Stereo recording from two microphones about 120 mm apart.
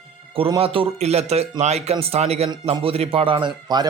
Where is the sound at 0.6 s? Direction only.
50° right (ahead or behind).